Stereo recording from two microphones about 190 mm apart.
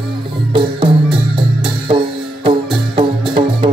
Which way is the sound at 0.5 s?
25° right (ahead or behind).